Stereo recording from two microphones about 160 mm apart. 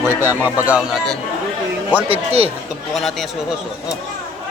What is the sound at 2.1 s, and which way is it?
Speech, 40° right (ahead or behind).